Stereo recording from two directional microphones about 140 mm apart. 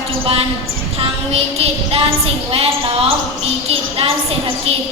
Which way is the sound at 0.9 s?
45° right (ahead or behind).